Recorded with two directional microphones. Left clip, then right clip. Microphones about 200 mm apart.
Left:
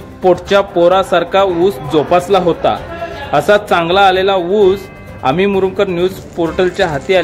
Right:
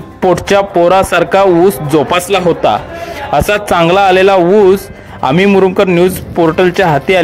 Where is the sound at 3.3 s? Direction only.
30° right (ahead or behind).